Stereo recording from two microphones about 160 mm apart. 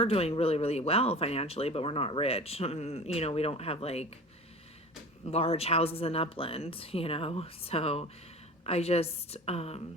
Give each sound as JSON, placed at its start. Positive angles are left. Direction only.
{"t": 0.0, "sound": "speech", "side_deg": 40}
{"t": 5.3, "sound": "speech", "side_deg": 40}